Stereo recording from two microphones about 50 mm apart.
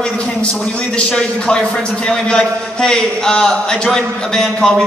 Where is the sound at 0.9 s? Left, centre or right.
Left.